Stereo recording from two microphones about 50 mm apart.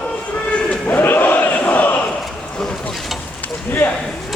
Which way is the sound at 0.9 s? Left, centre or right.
Left.